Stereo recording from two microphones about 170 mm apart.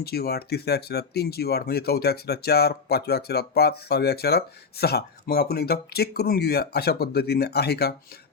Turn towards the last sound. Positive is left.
turn(degrees=70)  # may be behind; listen again after turning